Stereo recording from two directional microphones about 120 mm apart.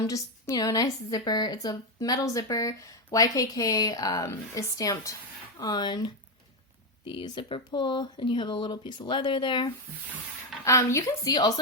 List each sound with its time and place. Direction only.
0.0 s a woman's voice: 30° left (ahead or behind)
10.6 s a woman's voice: 25° left (ahead or behind)